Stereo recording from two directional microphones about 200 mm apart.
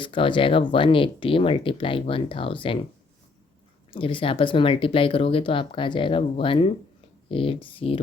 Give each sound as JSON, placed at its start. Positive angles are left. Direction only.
{"t": 0.0, "sound": "speech", "side_deg": 25}
{"t": 3.9, "sound": "speech", "side_deg": 25}